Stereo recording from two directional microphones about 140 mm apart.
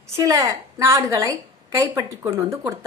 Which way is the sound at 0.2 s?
25° right (ahead or behind).